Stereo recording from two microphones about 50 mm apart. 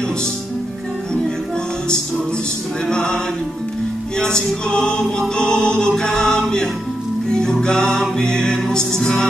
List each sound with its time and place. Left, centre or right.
2.9 s music: centre
4.2 s music: centre